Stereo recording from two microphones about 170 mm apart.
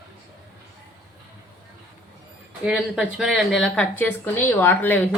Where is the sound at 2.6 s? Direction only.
5° right (ahead or behind).